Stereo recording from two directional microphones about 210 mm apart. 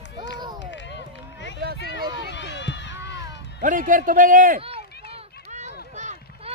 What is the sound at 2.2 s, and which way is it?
Run, 55° left (ahead or behind).